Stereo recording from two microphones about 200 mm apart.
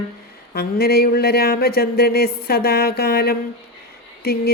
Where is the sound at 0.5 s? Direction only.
50° left (ahead or behind).